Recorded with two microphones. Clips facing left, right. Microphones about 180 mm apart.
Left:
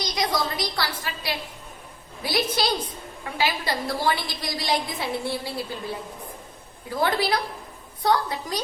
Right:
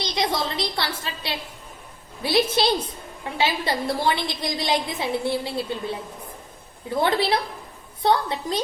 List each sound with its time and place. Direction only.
0.0 s a woman's voice: 25° right (ahead or behind)
6.9 s a woman's voice: 25° right (ahead or behind)